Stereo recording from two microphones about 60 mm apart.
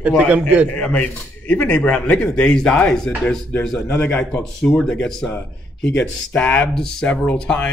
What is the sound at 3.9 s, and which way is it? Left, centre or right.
Speech, left.